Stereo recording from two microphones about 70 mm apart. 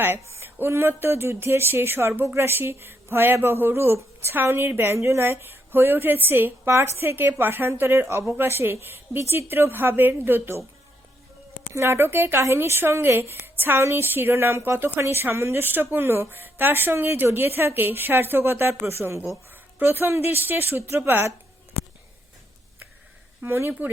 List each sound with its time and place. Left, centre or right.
0.2 s a woman's voice: right
11.7 s a woman's voice: right
23.4 s a woman's voice: right